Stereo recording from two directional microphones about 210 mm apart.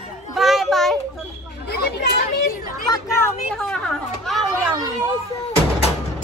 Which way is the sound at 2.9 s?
15° left (ahead or behind).